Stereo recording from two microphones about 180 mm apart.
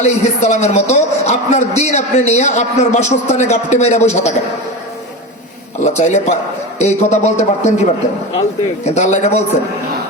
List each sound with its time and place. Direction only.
0.0 s a man's voice: 40° left (ahead or behind)
5.8 s a man's voice: 40° left (ahead or behind)